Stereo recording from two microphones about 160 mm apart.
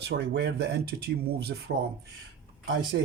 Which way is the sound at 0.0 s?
90° right.